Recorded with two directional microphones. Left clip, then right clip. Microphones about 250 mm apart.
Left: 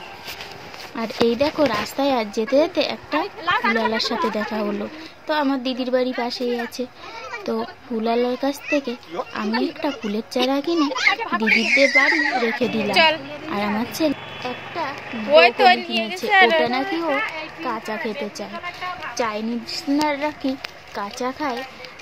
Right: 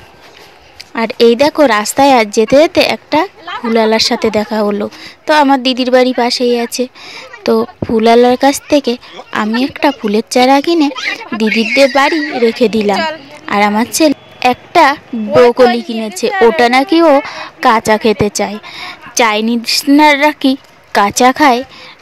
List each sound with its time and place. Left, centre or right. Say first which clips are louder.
0.9 s a woman's voice: right 11 dB; right
12.9 s a woman's voice: right 1 dB; centre
13.5 s a woman's voice: right 14 dB; right
15.3 s speech: right 6 dB; centre
16.0 s a woman's voice: right 7 dB; right
16.3 s speech: right 6 dB; centre
16.5 s a woman's voice: right 11 dB; right